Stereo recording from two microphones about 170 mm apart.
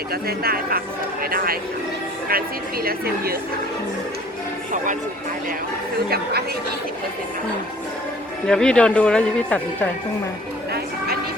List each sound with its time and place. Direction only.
0.1 s speech: 65° right (ahead or behind)
8.4 s speech: 5° left (ahead or behind)